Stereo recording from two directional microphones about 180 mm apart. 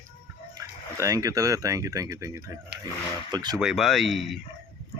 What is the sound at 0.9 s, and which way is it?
Speech, 20° right (ahead or behind).